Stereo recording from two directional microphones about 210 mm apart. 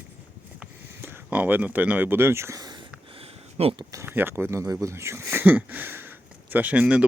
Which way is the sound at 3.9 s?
10° right (ahead or behind).